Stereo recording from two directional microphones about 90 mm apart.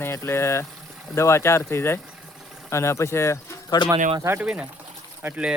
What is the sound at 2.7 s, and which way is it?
Speech, 35° left (ahead or behind).